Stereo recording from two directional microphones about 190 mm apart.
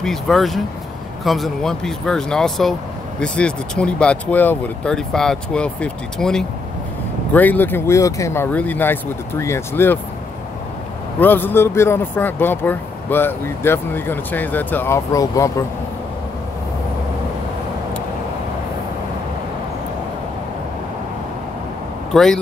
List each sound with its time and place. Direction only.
0.0 s speech: centre (ahead or behind)
11.1 s speech: 10° left (ahead or behind)
22.1 s speech: centre (ahead or behind)